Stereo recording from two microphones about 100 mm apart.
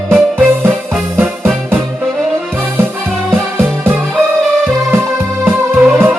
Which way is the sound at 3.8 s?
20° right (ahead or behind).